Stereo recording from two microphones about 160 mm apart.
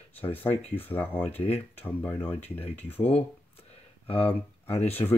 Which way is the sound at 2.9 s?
40° left (ahead or behind).